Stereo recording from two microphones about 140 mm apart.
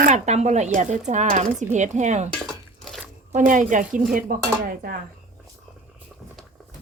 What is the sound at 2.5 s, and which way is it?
Drip, centre (ahead or behind).